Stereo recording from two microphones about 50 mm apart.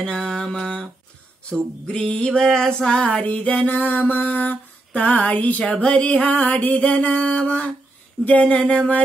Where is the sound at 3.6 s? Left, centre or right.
Left.